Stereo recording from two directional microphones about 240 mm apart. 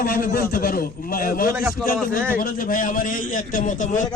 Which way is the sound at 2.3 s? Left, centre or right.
Left.